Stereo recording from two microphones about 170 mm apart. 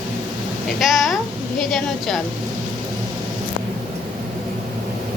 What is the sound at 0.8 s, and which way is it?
A woman's voice, centre (ahead or behind).